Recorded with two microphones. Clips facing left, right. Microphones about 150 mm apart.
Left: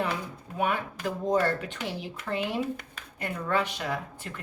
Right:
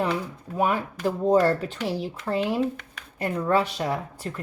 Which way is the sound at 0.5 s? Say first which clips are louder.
Right 4 dB; 35° right (ahead or behind).